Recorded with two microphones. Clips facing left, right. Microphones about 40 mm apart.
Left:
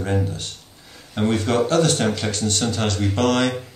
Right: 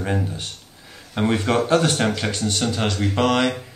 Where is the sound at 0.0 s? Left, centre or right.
Centre.